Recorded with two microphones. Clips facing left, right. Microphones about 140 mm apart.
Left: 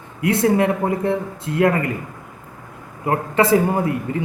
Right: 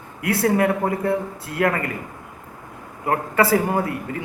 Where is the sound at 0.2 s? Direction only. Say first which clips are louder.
Left 2 dB; 20° left (ahead or behind).